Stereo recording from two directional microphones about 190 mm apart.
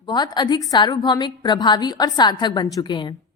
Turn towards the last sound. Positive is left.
turn(degrees=25)  # may be behind; listen again after turning